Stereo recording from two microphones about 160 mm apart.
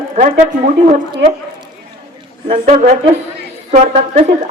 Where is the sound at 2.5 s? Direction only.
55° right (ahead or behind).